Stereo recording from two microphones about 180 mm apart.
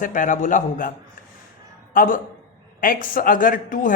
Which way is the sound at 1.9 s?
50° left (ahead or behind).